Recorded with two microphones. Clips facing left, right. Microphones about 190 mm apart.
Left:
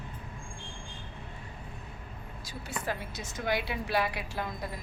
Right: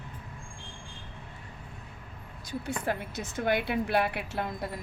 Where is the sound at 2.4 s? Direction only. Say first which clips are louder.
Right 5 dB; 55° right (ahead or behind).